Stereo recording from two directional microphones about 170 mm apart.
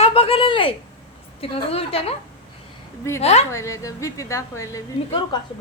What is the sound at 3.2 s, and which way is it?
Speech, 40° left (ahead or behind).